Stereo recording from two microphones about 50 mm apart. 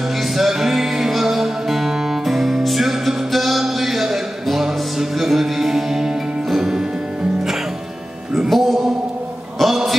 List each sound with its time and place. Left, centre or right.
0.2 s music: centre
8.3 s music: centre
9.6 s a sound: centre